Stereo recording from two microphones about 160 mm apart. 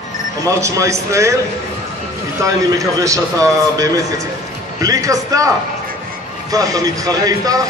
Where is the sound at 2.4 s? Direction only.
20° right (ahead or behind).